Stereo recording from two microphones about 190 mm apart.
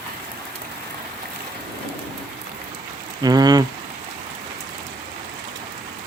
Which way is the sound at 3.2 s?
20° right (ahead or behind).